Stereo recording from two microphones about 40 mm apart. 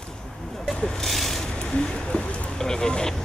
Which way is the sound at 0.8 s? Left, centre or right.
Centre.